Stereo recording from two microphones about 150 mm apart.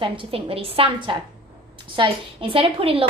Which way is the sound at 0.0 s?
35° right (ahead or behind).